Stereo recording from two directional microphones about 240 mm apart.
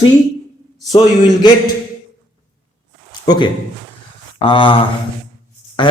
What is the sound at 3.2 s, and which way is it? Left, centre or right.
A man's voice, centre.